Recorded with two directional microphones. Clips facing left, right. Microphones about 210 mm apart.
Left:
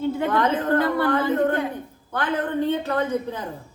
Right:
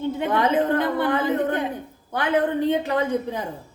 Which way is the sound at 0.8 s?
20° right (ahead or behind).